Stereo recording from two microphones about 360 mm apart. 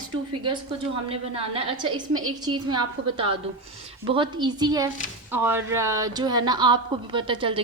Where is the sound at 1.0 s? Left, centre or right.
Centre.